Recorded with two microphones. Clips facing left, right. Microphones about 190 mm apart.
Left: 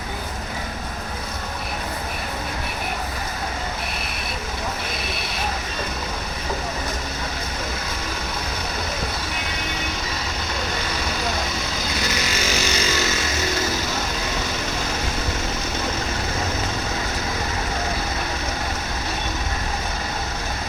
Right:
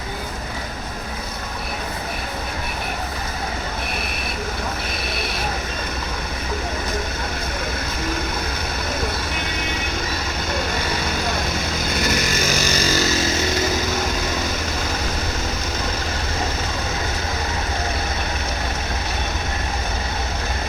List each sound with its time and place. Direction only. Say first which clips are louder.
12.0 s vehicle: right 4 dB; 50° right (ahead or behind)